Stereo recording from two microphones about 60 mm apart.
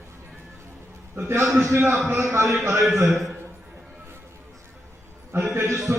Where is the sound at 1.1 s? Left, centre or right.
Right.